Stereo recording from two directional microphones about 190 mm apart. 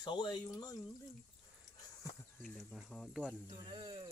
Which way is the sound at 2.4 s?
Centre (ahead or behind).